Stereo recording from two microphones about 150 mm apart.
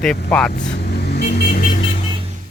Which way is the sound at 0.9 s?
90° left.